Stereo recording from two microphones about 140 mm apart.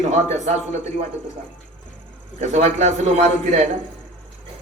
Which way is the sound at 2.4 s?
55° right (ahead or behind).